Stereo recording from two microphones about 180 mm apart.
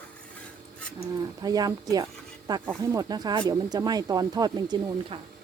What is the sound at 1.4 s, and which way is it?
Speech, 20° right (ahead or behind).